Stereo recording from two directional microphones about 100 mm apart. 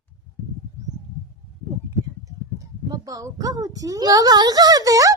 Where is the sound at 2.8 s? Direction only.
40° right (ahead or behind).